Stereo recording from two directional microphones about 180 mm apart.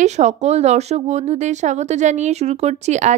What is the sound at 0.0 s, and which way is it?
Speech, 40° right (ahead or behind).